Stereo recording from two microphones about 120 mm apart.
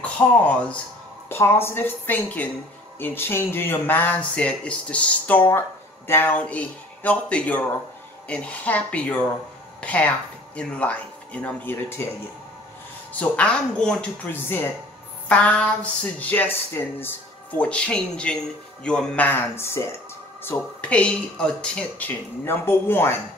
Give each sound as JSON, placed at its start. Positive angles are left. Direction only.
{"t": 0.0, "sound": "a woman's voice", "side_deg": 10}
{"t": 13.1, "sound": "speech", "side_deg": 10}
{"t": 14.3, "sound": "a woman's voice", "side_deg": 20}
{"t": 20.4, "sound": "speech", "side_deg": 10}